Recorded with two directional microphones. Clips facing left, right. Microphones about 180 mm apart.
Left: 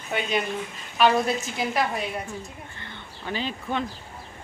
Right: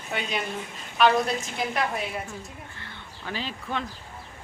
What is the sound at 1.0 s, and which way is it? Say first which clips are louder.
Speech: left 1 dB; 5° left (ahead or behind).